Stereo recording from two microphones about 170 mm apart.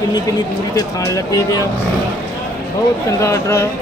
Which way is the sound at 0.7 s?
20° left (ahead or behind).